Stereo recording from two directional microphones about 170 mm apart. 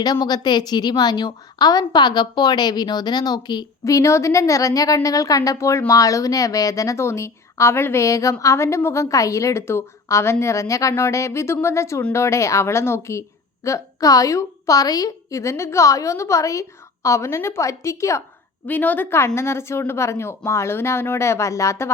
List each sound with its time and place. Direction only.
0.0 s a woman's voice: 25° left (ahead or behind)